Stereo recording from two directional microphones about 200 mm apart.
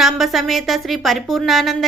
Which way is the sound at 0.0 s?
Centre (ahead or behind).